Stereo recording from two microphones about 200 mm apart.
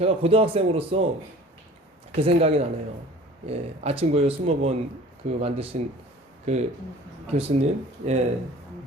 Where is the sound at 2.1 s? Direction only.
30° right (ahead or behind).